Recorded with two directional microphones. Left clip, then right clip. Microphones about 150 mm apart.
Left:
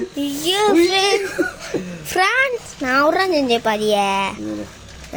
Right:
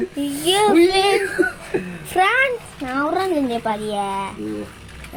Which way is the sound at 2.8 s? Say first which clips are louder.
Left 6 dB; 30° left (ahead or behind).